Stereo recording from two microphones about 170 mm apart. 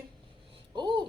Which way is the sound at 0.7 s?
25° right (ahead or behind).